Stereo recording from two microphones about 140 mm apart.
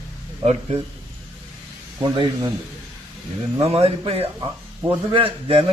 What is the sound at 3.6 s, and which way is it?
A man's voice, 45° right (ahead or behind).